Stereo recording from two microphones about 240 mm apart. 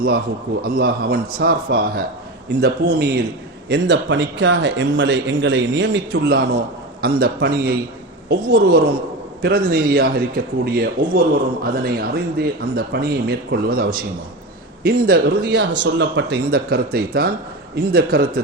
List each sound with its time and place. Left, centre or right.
0.6 s a man's voice: right